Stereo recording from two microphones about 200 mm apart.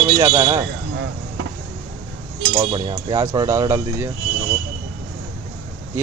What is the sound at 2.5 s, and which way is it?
Speech, 20° right (ahead or behind).